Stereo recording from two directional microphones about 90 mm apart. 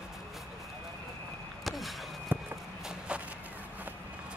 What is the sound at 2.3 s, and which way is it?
Walk, 20° right (ahead or behind).